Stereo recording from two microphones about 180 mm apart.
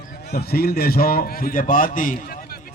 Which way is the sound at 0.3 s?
60° left (ahead or behind).